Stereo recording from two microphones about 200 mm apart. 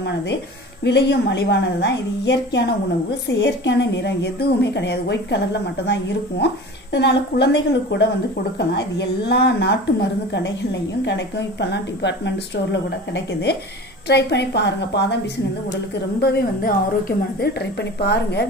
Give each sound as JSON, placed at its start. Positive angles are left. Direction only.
{"t": 0.8, "sound": "a woman's voice", "side_deg": 60}